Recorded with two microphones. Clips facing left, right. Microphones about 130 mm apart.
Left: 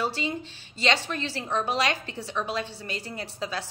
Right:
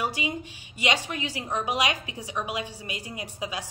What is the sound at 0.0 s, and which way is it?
A woman's voice, 15° right (ahead or behind).